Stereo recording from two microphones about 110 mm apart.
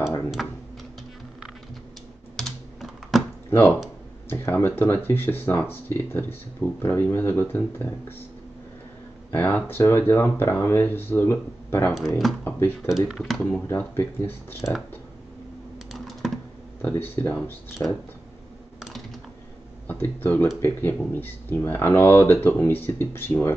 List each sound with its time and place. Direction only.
0.4 s a sound: centre (ahead or behind)
2.3 s typing: centre (ahead or behind)
3.4 s speech: 20° left (ahead or behind)
9.3 s speech: 15° left (ahead or behind)
11.9 s speech: centre (ahead or behind)
12.4 s speech: 20° left (ahead or behind)
12.8 s speech: 5° right (ahead or behind)
13.7 s speech: 20° left (ahead or behind)
15.9 s typing: centre (ahead or behind)
16.8 s speech: 20° left (ahead or behind)
17.8 s speech: 30° left (ahead or behind)
18.8 s dishes: centre (ahead or behind)
19.9 s speech: 20° left (ahead or behind)